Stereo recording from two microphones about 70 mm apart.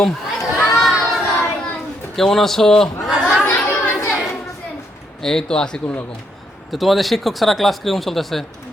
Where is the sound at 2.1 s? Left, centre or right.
Centre.